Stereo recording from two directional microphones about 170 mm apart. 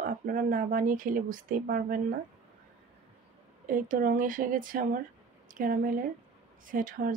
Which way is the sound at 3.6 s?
50° right (ahead or behind).